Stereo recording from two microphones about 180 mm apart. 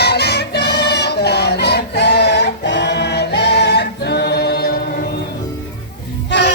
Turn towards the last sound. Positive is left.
turn(degrees=70)  # may be behind; listen again after turning